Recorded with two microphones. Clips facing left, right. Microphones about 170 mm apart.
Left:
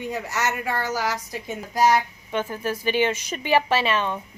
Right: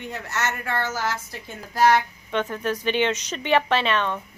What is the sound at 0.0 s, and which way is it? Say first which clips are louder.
A woman's voice: left 2 dB; 10° left (ahead or behind).